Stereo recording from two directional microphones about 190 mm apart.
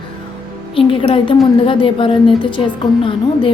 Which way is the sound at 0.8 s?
30° left (ahead or behind).